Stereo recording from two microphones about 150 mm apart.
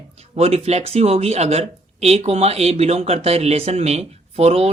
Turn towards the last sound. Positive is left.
turn(degrees=-45)  # may be behind; listen again after turning